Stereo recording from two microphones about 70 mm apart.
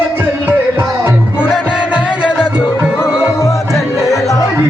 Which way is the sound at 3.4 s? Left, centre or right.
Left.